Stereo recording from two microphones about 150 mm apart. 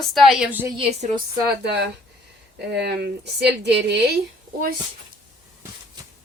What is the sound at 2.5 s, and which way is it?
Speech, 90° right.